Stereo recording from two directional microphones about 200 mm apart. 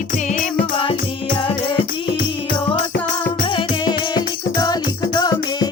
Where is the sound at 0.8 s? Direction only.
25° left (ahead or behind).